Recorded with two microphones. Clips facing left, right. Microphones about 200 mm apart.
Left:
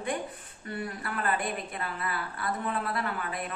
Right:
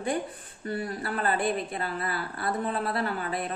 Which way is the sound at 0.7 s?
35° right (ahead or behind).